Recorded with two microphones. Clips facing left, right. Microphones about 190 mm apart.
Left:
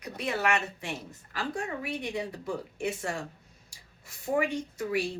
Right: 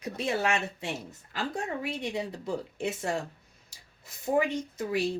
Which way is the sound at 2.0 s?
20° right (ahead or behind).